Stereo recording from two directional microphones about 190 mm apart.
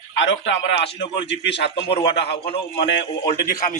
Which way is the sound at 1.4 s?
65° left (ahead or behind).